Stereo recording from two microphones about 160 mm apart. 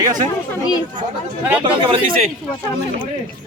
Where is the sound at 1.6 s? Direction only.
30° right (ahead or behind).